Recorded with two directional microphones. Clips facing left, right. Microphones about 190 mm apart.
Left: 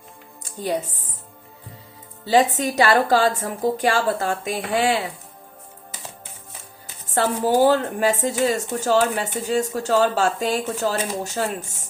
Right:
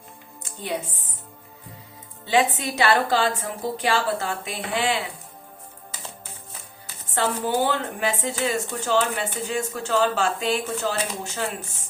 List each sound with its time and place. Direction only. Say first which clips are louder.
0.4 s music: left 5 dB; 40° left (ahead or behind)
2.2 s a woman's voice: left 4 dB; 40° left (ahead or behind)
7.1 s a woman's voice: left 4 dB; 40° left (ahead or behind)